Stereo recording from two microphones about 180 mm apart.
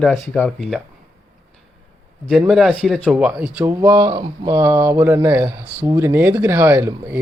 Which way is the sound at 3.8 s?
20° right (ahead or behind).